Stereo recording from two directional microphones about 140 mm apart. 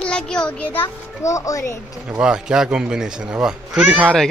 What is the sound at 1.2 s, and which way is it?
Speech, 25° left (ahead or behind).